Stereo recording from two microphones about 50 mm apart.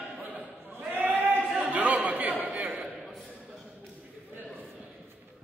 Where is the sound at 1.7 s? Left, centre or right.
Right.